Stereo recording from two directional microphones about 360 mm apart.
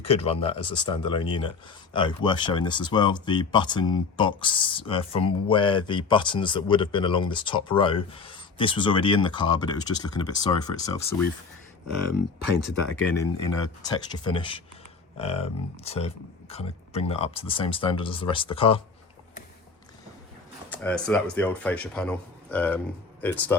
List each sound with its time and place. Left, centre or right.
0.0 s speech: centre
13.1 s speech: centre
20.7 s speech: centre